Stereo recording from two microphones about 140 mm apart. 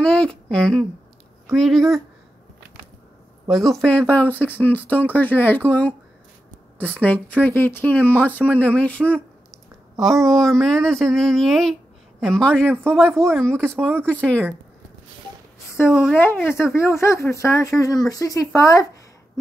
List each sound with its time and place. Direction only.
0.0 s speech: 5° left (ahead or behind)
3.4 s speech: centre (ahead or behind)
7.0 s speech: 10° left (ahead or behind)
15.9 s speech: 5° right (ahead or behind)
16.7 s speech: 20° left (ahead or behind)